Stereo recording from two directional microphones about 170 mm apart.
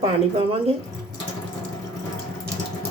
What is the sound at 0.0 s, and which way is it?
Speech, 35° right (ahead or behind).